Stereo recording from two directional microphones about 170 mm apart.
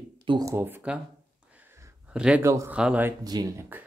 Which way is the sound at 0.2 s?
30° right (ahead or behind).